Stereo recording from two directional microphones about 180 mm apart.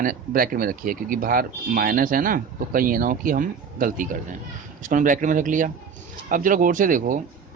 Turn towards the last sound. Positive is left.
turn(degrees=-45)  # may be behind; listen again after turning